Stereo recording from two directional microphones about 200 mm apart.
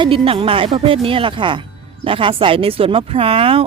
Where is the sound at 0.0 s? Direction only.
25° right (ahead or behind).